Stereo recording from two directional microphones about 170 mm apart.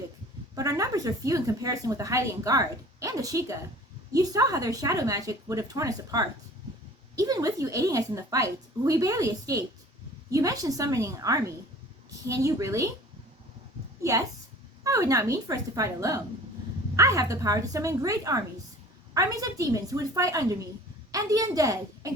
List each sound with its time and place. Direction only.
0.5 s speech: 20° right (ahead or behind)
14.0 s a woman's voice: 20° right (ahead or behind)